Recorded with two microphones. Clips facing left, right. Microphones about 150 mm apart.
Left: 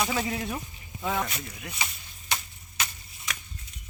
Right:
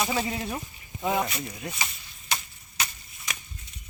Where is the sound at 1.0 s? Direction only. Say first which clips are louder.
Right 3 dB; 15° right (ahead or behind).